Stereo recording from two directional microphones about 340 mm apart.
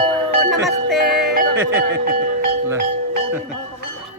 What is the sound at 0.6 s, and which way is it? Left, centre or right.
Music, centre.